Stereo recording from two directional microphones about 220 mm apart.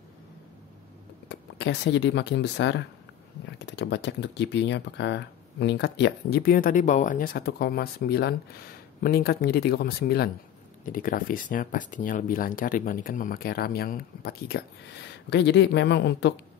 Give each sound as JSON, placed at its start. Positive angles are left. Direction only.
{"t": 1.3, "sound": "speech", "side_deg": 50}